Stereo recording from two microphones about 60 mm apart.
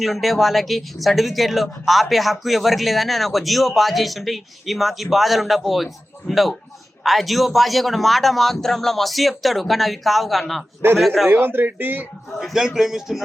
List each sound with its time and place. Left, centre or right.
0.0 s speech: centre
11.3 s speech: right
12.4 s speech: centre